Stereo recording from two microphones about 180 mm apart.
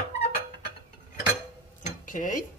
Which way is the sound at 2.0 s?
45° left (ahead or behind).